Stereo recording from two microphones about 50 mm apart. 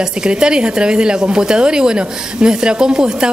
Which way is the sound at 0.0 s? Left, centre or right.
Centre.